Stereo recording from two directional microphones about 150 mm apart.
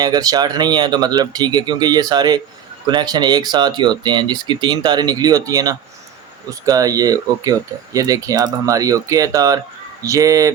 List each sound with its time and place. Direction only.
0.0 s speech: 25° right (ahead or behind)